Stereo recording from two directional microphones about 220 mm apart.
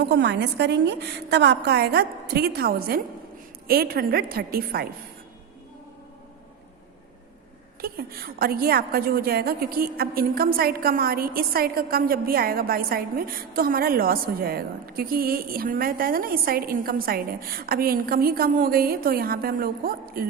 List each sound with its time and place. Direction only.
0.0 s a woman's voice: 50° right (ahead or behind)
7.8 s a woman's voice: 45° right (ahead or behind)